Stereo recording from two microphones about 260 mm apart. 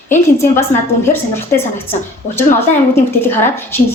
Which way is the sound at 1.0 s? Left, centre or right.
Centre.